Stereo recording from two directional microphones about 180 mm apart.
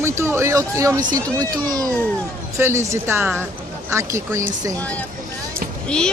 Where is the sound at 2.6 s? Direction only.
15° right (ahead or behind).